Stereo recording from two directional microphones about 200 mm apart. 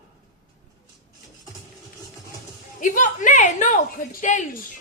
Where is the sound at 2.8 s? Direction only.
40° left (ahead or behind).